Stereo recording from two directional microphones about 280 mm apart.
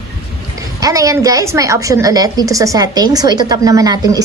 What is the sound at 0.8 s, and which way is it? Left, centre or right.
A woman's voice, centre.